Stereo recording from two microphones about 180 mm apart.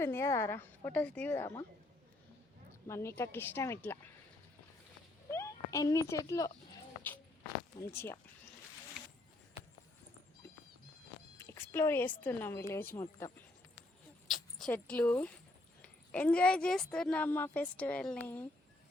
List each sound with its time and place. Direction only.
0.0 s a woman's voice: 15° left (ahead or behind)
2.8 s a woman's voice: 15° left (ahead or behind)
5.3 s speech: 15° left (ahead or behind)
7.8 s a woman's voice: 15° left (ahead or behind)
11.3 s a woman's voice: 15° left (ahead or behind)
14.3 s a woman's voice: centre (ahead or behind)